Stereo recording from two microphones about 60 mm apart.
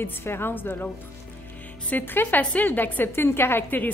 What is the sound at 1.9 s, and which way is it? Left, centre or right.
A woman's voice, left.